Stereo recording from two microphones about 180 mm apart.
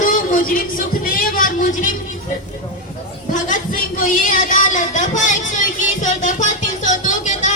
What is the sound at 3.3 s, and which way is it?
A man's voice, 45° left (ahead or behind).